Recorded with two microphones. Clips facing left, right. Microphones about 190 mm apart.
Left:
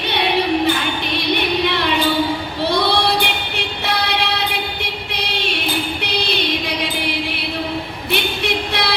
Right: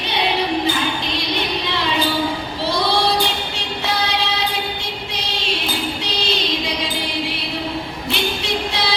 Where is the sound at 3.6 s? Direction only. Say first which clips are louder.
Left 2 dB; 60° left (ahead or behind).